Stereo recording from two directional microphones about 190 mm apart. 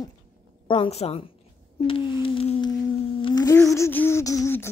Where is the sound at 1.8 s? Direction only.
30° left (ahead or behind).